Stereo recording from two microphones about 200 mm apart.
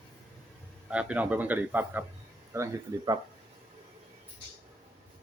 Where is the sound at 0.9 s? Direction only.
5° right (ahead or behind).